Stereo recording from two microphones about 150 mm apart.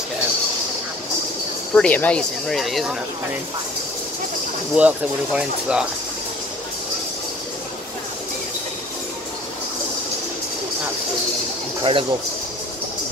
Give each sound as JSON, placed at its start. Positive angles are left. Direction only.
{"t": 1.8, "sound": "speech", "side_deg": 10}
{"t": 4.7, "sound": "speech", "side_deg": -10}
{"t": 11.8, "sound": "speech", "side_deg": -35}